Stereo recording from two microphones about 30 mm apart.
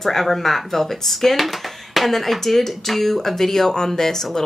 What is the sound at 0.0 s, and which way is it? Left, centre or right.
A woman's voice, centre.